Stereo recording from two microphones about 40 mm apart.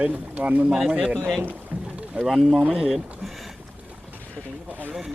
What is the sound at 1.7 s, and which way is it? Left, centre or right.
Boat, right.